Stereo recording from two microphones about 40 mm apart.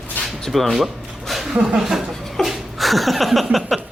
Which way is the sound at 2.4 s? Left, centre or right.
Centre.